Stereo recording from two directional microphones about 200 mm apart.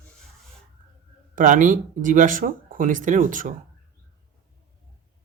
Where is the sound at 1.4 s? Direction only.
40° right (ahead or behind).